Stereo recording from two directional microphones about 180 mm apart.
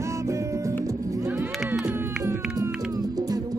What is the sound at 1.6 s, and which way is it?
Music, 5° right (ahead or behind).